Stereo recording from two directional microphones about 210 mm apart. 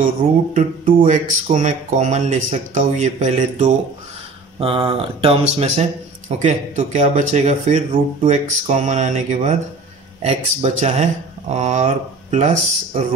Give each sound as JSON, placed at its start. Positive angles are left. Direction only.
{"t": 0.6, "sound": "speech", "side_deg": -35}